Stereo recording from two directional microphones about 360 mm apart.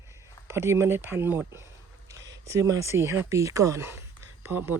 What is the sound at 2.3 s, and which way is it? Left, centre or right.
Speech, centre.